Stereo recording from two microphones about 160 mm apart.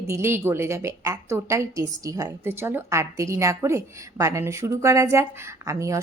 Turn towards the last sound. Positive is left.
turn(degrees=-20)  # may be behind; listen again after turning